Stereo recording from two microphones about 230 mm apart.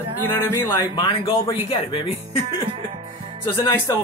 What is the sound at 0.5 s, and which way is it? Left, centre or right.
Speech, centre.